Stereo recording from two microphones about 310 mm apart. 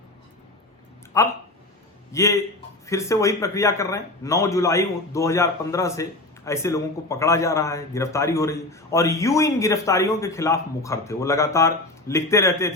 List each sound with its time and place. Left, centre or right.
1.1 s a man's voice: centre